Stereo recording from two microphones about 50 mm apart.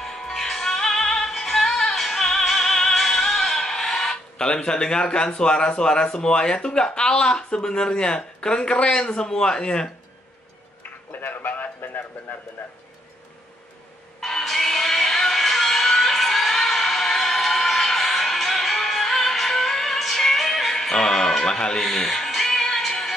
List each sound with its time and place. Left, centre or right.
0.0 s music: centre
6.1 s speech: centre
11.1 s a sound: left
14.2 s music: centre